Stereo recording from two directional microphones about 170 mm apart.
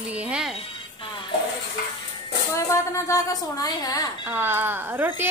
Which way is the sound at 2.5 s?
20° left (ahead or behind).